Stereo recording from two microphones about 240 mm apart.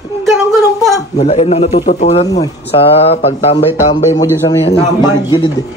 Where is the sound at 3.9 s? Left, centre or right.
Centre.